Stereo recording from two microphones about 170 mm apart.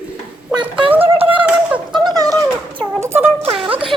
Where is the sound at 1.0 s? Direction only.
35° right (ahead or behind).